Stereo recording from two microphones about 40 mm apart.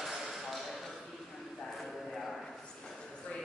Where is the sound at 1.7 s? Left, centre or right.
Centre.